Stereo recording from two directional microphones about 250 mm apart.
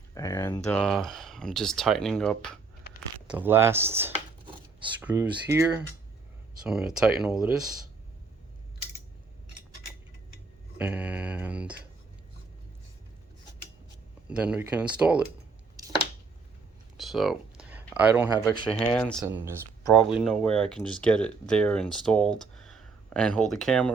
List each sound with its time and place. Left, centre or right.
0.1 s speech: centre
3.2 s speech: centre
10.8 s speech: centre
14.3 s speech: centre
15.8 s a sound: centre
17.0 s speech: centre
18.4 s speech: centre
18.9 s speech: centre
19.2 s speech: centre